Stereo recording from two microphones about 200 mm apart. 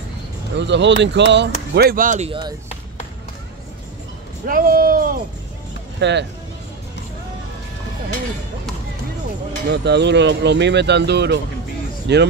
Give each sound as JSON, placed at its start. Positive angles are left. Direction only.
{"t": 0.6, "sound": "speech", "side_deg": -60}
{"t": 4.5, "sound": "speech", "side_deg": -45}
{"t": 5.9, "sound": "speech", "side_deg": -60}
{"t": 9.7, "sound": "speech", "side_deg": -60}